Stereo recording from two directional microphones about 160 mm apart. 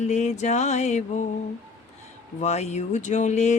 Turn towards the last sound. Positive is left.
turn(degrees=45)  # may be behind; listen again after turning